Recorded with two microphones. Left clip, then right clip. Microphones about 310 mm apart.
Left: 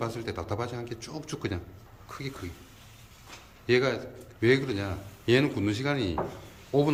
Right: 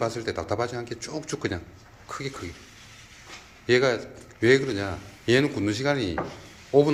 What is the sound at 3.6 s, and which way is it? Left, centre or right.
A man's voice, centre.